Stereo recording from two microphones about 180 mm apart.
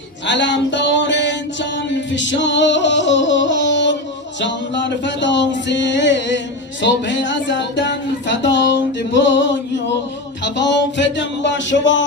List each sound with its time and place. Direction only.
0.3 s a sound: 85° left
1.9 s music: 90° left
4.4 s speech: 85° left